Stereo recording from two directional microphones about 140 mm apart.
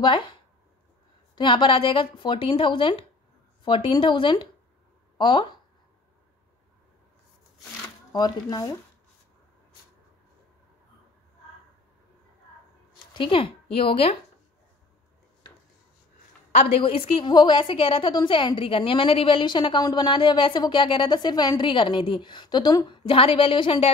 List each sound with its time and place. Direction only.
0.0 s a woman's voice: 35° left (ahead or behind)
1.3 s a woman's voice: 35° left (ahead or behind)
8.1 s speech: 30° left (ahead or behind)
13.1 s speech: 35° left (ahead or behind)
16.5 s a woman's voice: 45° left (ahead or behind)